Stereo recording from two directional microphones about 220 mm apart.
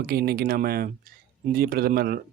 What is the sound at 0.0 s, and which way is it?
A man's voice, 45° right (ahead or behind).